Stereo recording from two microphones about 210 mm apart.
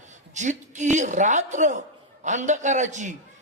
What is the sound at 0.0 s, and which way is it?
A woman's voice, 35° right (ahead or behind).